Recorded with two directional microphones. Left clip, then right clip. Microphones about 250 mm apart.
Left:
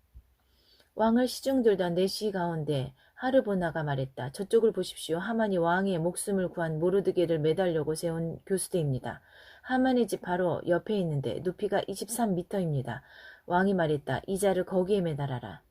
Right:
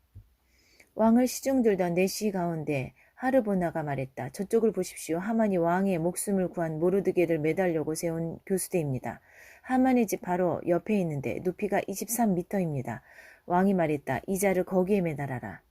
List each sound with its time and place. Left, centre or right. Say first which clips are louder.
0.9 s a woman's voice: right 2 dB; right